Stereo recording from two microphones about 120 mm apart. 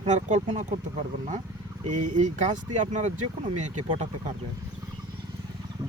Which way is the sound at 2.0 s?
90° right.